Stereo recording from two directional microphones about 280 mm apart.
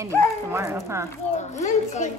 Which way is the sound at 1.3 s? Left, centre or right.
Left.